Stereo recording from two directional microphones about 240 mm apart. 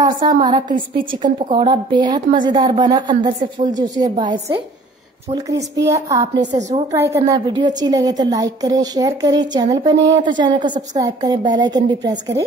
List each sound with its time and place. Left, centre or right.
0.3 s a woman's voice: centre
5.3 s a woman's voice: centre
9.9 s a woman's voice: right
10.2 s a woman's voice: centre